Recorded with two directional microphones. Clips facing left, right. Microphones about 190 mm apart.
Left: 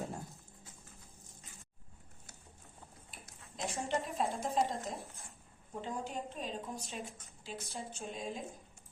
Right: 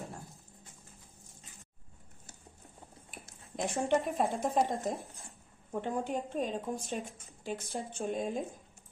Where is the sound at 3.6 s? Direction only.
55° right (ahead or behind).